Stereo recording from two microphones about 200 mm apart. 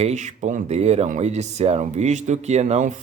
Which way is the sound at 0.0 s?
35° right (ahead or behind).